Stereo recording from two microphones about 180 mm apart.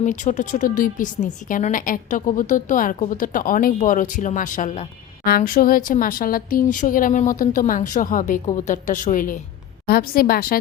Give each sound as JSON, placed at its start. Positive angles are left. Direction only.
{"t": 0.0, "sound": "a woman's voice", "side_deg": 45}
{"t": 5.2, "sound": "a woman's voice", "side_deg": 55}